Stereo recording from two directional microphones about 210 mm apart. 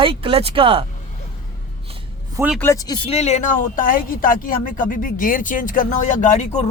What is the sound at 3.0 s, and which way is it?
Speech, 30° left (ahead or behind).